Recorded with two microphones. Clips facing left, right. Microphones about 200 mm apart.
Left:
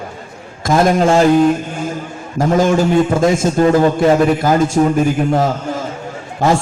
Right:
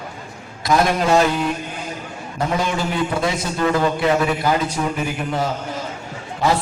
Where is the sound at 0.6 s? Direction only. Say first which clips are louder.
Left 5 dB; 45° left (ahead or behind).